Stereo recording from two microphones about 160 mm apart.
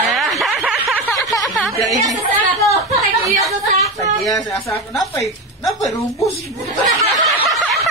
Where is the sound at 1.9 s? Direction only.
20° right (ahead or behind).